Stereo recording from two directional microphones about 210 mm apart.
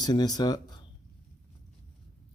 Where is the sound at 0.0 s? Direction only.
20° left (ahead or behind).